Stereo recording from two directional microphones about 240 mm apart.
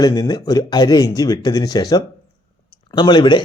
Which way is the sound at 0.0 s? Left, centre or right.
Centre.